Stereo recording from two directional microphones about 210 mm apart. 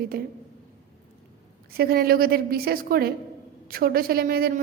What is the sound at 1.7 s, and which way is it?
A woman's voice, 45° right (ahead or behind).